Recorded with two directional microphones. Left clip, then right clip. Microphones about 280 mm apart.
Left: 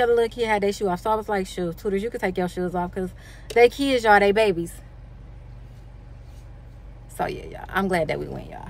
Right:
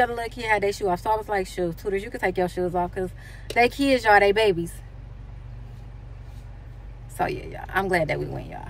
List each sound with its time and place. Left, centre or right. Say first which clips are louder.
0.1 s speech: left 4 dB; centre
7.2 s speech: right 1 dB; centre